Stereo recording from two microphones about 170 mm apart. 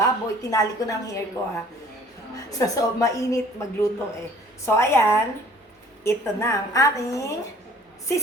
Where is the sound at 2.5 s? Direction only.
20° left (ahead or behind).